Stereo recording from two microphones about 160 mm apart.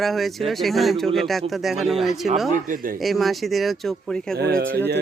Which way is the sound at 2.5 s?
60° right (ahead or behind).